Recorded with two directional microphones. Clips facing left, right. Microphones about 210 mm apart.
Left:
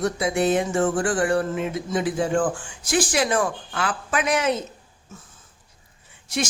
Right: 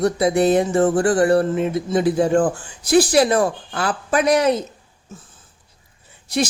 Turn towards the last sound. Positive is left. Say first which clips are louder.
# right 6 dB
turn(degrees=-35)  # may be behind; listen again after turning